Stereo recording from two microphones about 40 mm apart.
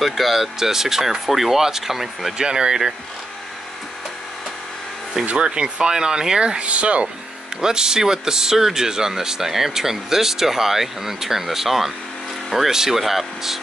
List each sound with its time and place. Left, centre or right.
0.0 s speech: centre
2.3 s speech: centre
5.4 s speech: right
6.6 s speech: right
7.6 s speech: centre